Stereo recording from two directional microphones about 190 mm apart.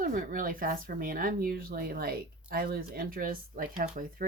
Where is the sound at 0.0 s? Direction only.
45° right (ahead or behind).